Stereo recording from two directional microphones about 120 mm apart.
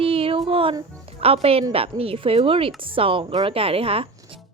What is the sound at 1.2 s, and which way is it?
A woman's voice, 55° right (ahead or behind).